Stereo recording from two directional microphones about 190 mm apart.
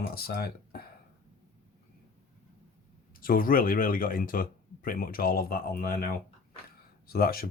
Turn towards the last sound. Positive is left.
turn(degrees=50)  # may be behind; listen again after turning